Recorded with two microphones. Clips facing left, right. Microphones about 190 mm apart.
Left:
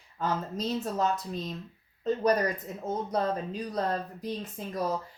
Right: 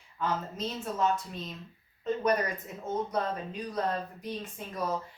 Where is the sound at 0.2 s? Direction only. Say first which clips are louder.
Left 2 dB; 35° left (ahead or behind).